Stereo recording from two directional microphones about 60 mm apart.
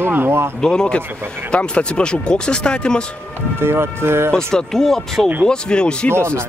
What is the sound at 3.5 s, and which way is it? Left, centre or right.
Speech, right.